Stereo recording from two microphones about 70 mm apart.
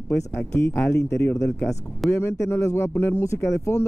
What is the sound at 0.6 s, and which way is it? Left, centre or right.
Speech, left.